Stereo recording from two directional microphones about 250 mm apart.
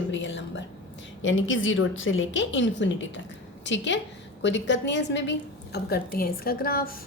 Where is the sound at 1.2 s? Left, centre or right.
Left.